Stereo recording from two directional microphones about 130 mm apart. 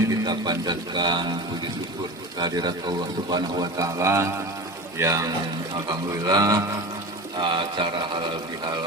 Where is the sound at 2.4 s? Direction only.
30° right (ahead or behind).